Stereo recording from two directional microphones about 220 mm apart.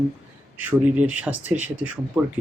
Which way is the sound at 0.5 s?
5° right (ahead or behind).